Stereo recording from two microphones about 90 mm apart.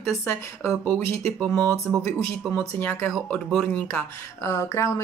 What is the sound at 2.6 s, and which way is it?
A woman's voice, 20° left (ahead or behind).